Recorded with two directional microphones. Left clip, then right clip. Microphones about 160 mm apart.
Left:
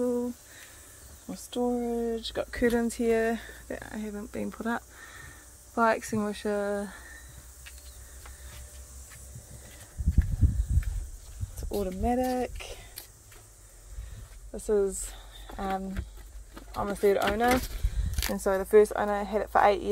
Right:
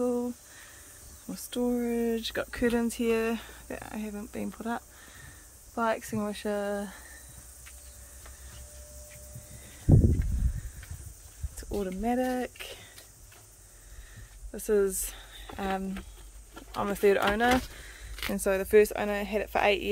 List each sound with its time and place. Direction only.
0.0 s a sound: centre (ahead or behind)
1.3 s a woman's voice: 10° right (ahead or behind)
2.5 s speech: centre (ahead or behind)
11.7 s a woman's voice: 10° right (ahead or behind)
14.5 s a woman's voice: 20° right (ahead or behind)